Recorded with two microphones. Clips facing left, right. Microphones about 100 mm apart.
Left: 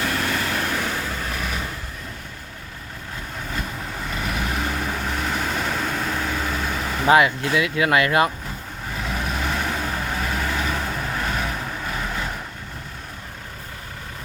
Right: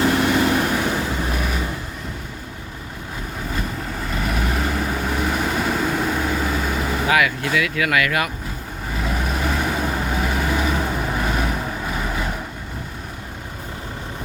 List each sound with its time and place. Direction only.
0.0 s vehicle: 20° right (ahead or behind)
4.1 s vehicle: centre (ahead or behind)
7.1 s speech: 30° left (ahead or behind)
8.9 s vehicle: centre (ahead or behind)